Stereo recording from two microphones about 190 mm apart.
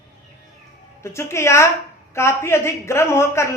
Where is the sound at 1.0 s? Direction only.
15° left (ahead or behind).